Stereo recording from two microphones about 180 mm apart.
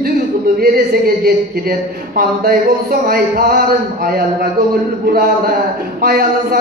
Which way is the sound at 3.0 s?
55° right (ahead or behind).